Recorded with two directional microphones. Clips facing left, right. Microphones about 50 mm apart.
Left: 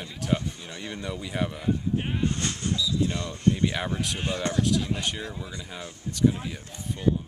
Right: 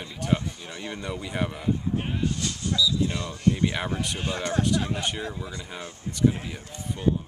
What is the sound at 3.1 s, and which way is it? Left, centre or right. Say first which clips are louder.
Speech: even; right.